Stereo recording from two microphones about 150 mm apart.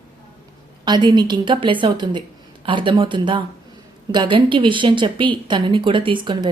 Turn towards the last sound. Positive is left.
turn(degrees=-30)  # may be behind; listen again after turning